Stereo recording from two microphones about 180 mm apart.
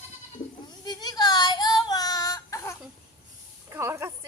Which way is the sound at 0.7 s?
20° left (ahead or behind).